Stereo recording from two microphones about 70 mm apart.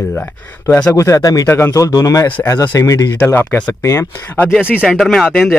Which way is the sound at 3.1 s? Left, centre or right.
Left.